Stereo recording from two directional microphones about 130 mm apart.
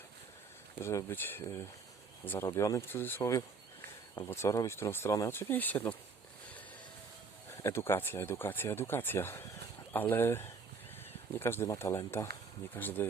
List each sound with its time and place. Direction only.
0.8 s speech: 20° left (ahead or behind)
2.5 s speech: 25° left (ahead or behind)
7.6 s speech: 20° left (ahead or behind)